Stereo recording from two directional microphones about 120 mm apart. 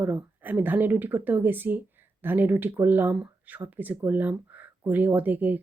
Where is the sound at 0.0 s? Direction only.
15° right (ahead or behind).